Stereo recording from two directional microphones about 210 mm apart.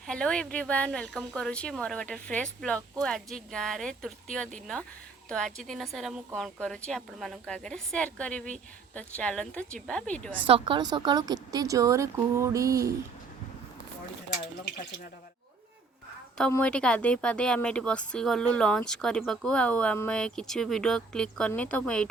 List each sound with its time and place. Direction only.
0.1 s speech: 5° left (ahead or behind)
10.4 s speech: 25° right (ahead or behind)
16.4 s speech: 5° left (ahead or behind)